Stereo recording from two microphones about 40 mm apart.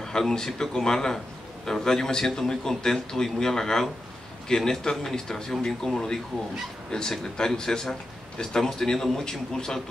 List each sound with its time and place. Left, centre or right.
0.0 s a sound: centre
0.6 s a man's voice: centre
6.9 s a man's voice: centre